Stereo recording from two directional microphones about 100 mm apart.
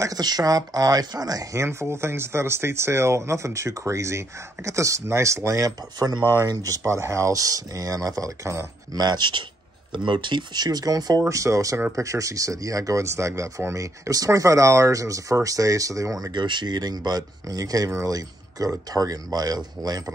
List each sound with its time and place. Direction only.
0.0 s speech: 40° right (ahead or behind)
8.9 s speech: 45° right (ahead or behind)